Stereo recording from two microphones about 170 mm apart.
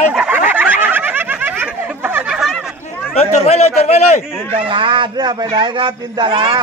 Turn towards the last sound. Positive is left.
turn(degrees=-25)  # may be behind; listen again after turning